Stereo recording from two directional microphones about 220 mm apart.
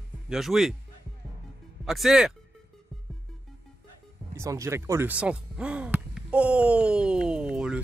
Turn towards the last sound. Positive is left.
turn(degrees=-5)  # may be behind; listen again after turning